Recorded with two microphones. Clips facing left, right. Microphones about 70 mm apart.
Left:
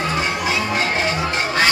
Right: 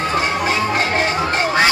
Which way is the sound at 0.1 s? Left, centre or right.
Right.